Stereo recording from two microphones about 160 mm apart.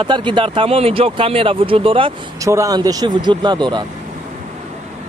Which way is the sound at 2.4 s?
20° right (ahead or behind).